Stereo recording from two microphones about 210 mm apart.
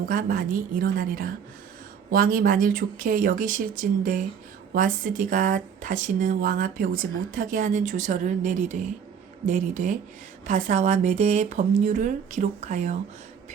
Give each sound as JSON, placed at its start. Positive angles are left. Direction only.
{"t": 0.0, "sound": "speech", "side_deg": -40}